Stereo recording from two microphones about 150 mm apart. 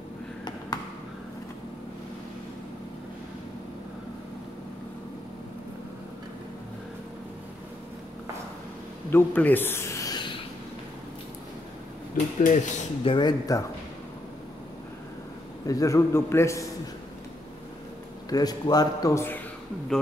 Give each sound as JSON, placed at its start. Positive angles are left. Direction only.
{"t": 9.1, "sound": "a man's voice", "side_deg": 10}
{"t": 10.1, "sound": "a sound", "side_deg": 35}
{"t": 12.4, "sound": "speech", "side_deg": 55}
{"t": 13.0, "sound": "a man's voice", "side_deg": 30}
{"t": 15.6, "sound": "a man's voice", "side_deg": 20}
{"t": 18.3, "sound": "a man's voice", "side_deg": 25}